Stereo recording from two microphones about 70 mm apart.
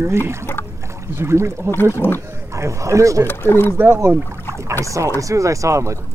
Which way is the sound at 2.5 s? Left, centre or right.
Right.